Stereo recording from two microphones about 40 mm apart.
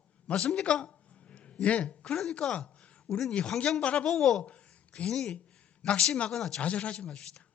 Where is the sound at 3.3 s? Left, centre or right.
Left.